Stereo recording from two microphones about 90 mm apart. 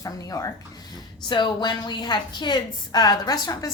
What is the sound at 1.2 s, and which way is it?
A woman's voice, 60° left (ahead or behind).